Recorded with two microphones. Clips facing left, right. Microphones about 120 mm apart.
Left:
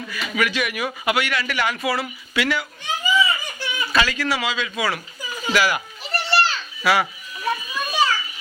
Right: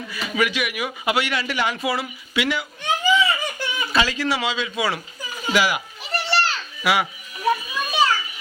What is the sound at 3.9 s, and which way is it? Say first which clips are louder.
A man's voice: even; 25° right (ahead or behind).